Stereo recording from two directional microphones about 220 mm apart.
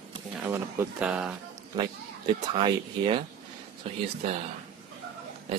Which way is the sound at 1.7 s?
20° right (ahead or behind).